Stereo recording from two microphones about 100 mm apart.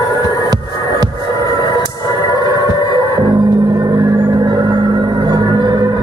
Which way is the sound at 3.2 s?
45° right (ahead or behind).